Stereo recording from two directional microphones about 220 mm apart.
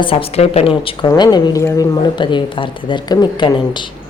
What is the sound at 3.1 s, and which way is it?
Speech, 20° left (ahead or behind).